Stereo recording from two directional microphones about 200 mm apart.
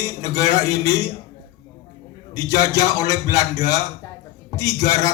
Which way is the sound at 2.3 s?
15° left (ahead or behind).